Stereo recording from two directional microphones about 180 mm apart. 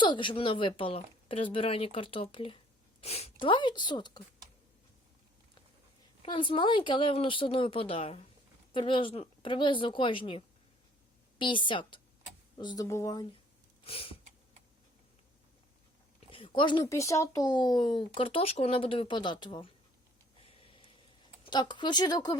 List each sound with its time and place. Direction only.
0.0 s speech: 25° left (ahead or behind)
6.2 s speech: 25° left (ahead or behind)
13.8 s a sound: 30° left (ahead or behind)
16.3 s speech: 30° left (ahead or behind)
21.4 s speech: 25° left (ahead or behind)